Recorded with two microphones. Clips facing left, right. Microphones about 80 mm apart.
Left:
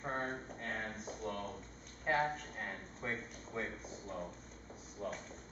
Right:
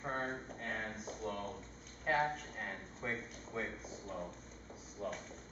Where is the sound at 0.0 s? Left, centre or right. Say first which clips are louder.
Even; centre.